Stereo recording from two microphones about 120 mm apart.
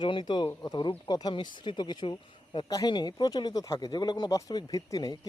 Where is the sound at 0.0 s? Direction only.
40° left (ahead or behind).